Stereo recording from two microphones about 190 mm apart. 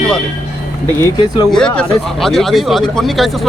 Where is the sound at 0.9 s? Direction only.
15° left (ahead or behind).